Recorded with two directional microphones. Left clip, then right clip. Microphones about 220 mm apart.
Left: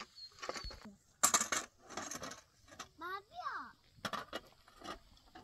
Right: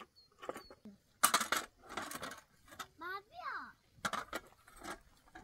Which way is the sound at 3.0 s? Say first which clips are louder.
Left 2 dB; 15° right (ahead or behind).